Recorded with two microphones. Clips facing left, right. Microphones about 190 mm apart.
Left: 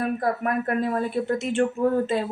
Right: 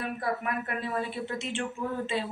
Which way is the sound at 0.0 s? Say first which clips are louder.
Left 7 dB; 45° left (ahead or behind).